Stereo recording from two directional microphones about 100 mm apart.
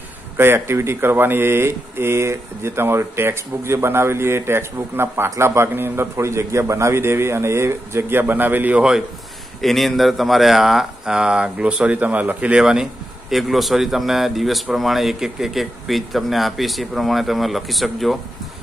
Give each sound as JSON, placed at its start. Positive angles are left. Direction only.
{"t": 0.4, "sound": "speech", "side_deg": -25}
{"t": 9.6, "sound": "speech", "side_deg": 0}